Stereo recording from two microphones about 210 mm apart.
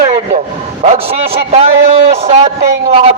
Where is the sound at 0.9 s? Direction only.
30° right (ahead or behind).